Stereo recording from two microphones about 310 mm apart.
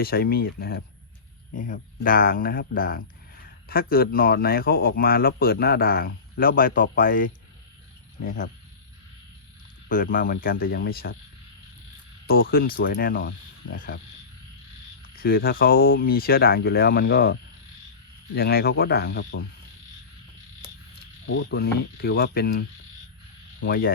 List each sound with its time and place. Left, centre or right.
0.0 s speech: left
9.9 s speech: left
12.3 s speech: left
15.1 s speech: left
18.3 s speech: left
21.2 s speech: left